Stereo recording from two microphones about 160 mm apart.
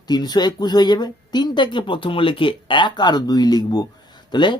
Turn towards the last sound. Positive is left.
turn(degrees=30)  # may be behind; listen again after turning